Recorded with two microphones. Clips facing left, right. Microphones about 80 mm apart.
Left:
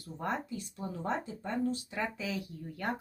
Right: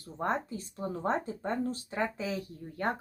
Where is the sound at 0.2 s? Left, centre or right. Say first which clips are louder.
Right 4 dB; right.